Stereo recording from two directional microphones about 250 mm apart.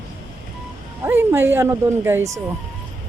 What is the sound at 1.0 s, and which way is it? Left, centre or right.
Speech, centre.